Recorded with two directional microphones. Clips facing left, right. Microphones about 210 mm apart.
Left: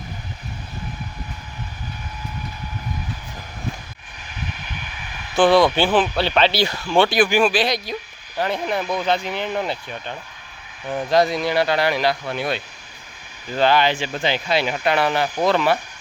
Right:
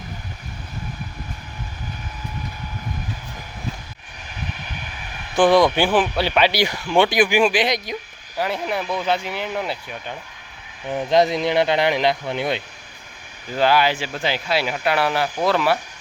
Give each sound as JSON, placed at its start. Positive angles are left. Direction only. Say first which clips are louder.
{"t": 5.4, "sound": "speech", "louder": "even", "side_deg": -15}
{"t": 8.4, "sound": "speech", "louder": "left 1 dB", "side_deg": -5}
{"t": 10.8, "sound": "speech", "louder": "right 1 dB", "side_deg": -20}
{"t": 13.6, "sound": "speech", "louder": "even", "side_deg": -10}